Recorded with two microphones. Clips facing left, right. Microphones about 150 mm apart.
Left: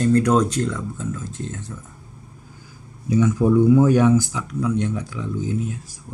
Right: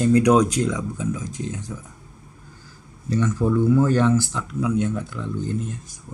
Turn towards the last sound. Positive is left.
turn(degrees=5)  # may be behind; listen again after turning